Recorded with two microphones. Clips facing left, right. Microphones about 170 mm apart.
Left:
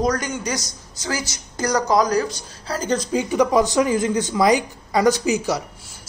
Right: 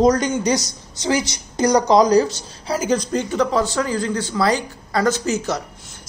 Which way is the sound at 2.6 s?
10° right (ahead or behind).